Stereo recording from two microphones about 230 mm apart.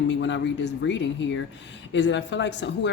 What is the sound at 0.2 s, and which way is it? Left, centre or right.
Speech, left.